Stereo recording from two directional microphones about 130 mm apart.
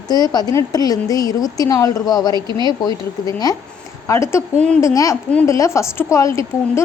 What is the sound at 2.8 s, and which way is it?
A woman's voice, 30° left (ahead or behind).